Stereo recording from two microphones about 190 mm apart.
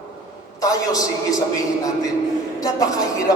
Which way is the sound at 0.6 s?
20° left (ahead or behind).